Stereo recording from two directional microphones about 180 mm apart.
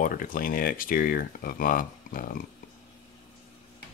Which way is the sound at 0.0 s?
50° left (ahead or behind).